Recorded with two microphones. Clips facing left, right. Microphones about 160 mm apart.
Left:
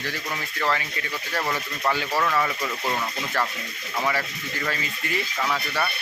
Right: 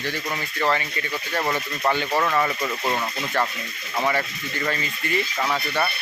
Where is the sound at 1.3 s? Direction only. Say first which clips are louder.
Right 2 dB; 15° right (ahead or behind).